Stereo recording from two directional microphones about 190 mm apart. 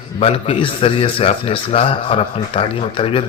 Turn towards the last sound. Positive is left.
turn(degrees=30)  # may be behind; listen again after turning